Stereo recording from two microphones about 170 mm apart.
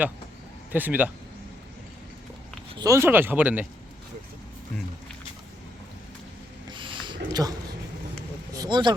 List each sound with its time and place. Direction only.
0.7 s speech: 10° right (ahead or behind)
2.7 s speech: 20° right (ahead or behind)
6.7 s a sound: 30° right (ahead or behind)
7.4 s a man's voice: 5° right (ahead or behind)
8.5 s vehicle: 25° right (ahead or behind)